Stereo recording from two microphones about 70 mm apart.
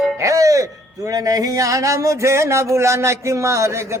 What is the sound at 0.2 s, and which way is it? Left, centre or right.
A man's voice, right.